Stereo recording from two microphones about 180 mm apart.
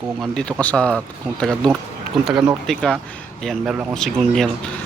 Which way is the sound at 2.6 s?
5° left (ahead or behind).